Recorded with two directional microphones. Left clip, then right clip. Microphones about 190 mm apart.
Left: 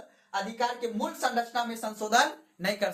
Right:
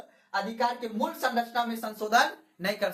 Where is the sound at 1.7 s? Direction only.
20° left (ahead or behind).